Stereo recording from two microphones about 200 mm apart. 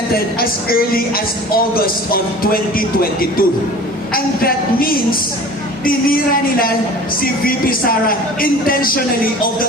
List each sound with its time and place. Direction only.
0.1 s speech: 50° left (ahead or behind)